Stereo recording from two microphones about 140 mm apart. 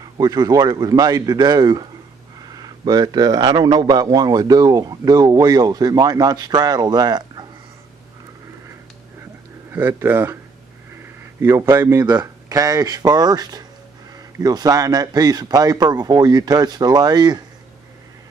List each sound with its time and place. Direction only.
0.2 s speech: 25° right (ahead or behind)
9.7 s speech: 15° right (ahead or behind)
11.4 s speech: 20° right (ahead or behind)